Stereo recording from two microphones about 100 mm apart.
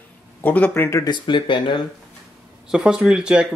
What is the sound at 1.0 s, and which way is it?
Speech, 50° left (ahead or behind).